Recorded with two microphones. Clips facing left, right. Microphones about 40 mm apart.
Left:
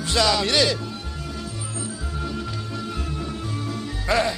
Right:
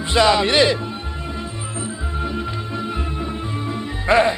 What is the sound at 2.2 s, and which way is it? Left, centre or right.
Music, right.